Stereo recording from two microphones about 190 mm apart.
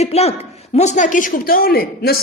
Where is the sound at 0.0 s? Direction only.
35° left (ahead or behind).